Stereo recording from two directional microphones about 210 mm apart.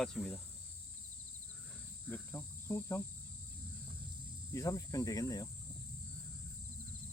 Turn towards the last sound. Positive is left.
turn(degrees=15)  # may be behind; listen again after turning